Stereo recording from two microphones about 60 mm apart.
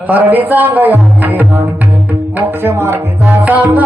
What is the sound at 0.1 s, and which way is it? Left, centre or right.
Music, right.